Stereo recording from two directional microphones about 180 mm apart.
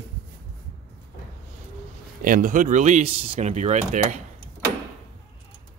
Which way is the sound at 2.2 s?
50° right (ahead or behind).